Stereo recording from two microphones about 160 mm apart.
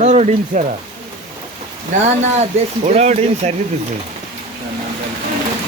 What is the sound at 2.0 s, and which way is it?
Speech, 45° right (ahead or behind).